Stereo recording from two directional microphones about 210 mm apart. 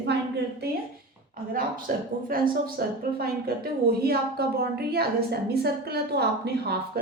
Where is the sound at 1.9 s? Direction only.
40° right (ahead or behind).